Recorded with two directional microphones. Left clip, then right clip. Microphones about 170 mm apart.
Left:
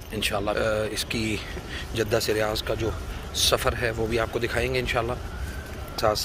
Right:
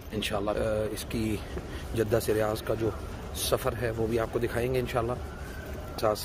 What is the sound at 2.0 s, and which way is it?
Speech, 30° right (ahead or behind).